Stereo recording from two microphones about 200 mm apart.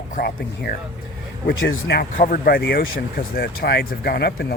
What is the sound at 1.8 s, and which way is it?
Speech, 50° left (ahead or behind).